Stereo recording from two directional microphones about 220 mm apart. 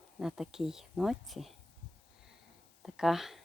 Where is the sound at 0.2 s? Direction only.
Centre (ahead or behind).